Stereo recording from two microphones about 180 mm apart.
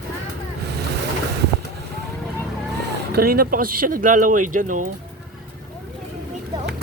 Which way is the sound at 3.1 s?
55° right (ahead or behind).